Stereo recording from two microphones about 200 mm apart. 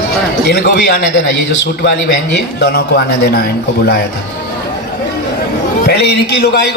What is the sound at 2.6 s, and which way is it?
Speech, 55° left (ahead or behind).